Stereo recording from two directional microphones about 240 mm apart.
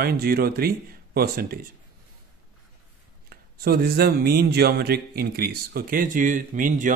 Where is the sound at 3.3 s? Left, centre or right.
Right.